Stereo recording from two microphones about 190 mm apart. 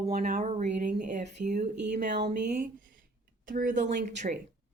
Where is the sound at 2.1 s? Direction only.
65° right (ahead or behind).